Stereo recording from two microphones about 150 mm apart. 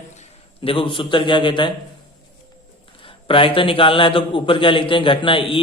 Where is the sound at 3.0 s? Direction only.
35° left (ahead or behind).